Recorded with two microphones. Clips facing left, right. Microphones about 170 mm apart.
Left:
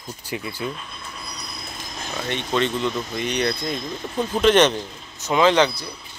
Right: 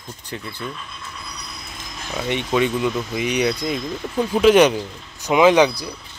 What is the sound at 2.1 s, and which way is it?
Speech, 10° right (ahead or behind).